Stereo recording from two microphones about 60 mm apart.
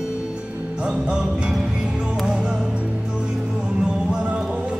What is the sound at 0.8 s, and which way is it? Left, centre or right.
Music, centre.